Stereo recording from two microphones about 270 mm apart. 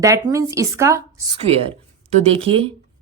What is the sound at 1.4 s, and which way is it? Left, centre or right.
A woman's voice, right.